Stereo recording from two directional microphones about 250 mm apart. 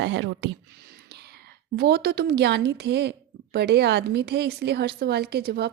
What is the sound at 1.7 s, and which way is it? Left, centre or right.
A woman's voice, right.